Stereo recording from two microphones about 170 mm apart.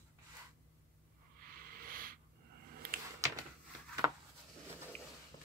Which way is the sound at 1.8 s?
55° right (ahead or behind).